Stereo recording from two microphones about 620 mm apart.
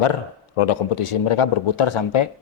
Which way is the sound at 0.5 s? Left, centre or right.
Left.